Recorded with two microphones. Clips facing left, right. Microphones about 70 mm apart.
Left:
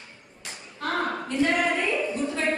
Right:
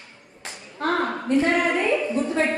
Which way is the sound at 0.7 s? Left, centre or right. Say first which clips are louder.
Right 4 dB; right.